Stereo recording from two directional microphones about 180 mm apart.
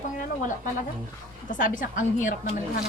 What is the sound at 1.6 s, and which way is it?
Speech, 45° left (ahead or behind).